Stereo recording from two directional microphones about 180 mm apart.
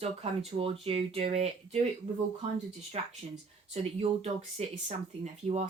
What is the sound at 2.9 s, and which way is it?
A woman's voice, 35° right (ahead or behind).